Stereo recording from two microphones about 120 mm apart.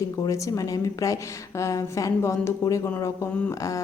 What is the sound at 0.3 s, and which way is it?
A woman's voice, 25° left (ahead or behind).